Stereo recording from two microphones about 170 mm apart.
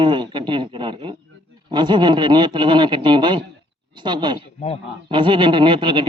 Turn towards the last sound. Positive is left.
turn(degrees=-30)  # may be behind; listen again after turning